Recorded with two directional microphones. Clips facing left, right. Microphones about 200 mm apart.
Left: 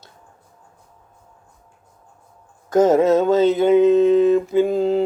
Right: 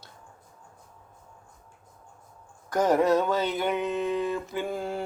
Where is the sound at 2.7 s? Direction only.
25° left (ahead or behind).